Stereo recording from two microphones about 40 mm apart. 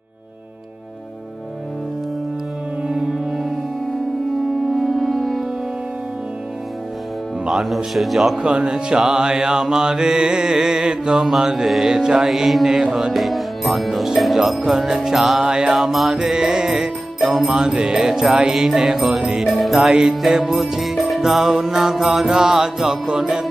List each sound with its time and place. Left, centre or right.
3.3 s music: centre
4.7 s music: centre
7.4 s music: centre
8.4 s speech: right
9.0 s mantra: centre
12.3 s mantra: centre
13.1 s music: centre
15.4 s mantra: centre
20.2 s music: centre
21.2 s mantra: centre
23.0 s music: centre